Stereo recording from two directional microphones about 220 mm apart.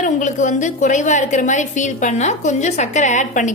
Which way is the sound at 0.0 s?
35° left (ahead or behind).